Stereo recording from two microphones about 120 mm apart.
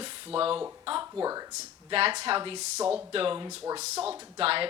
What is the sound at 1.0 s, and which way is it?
Speech, 30° right (ahead or behind).